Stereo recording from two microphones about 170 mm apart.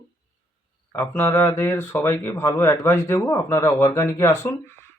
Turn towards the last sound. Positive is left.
turn(degrees=15)  # may be behind; listen again after turning